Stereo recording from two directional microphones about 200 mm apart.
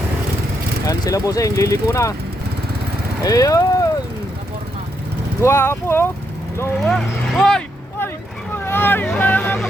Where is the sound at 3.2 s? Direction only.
15° left (ahead or behind).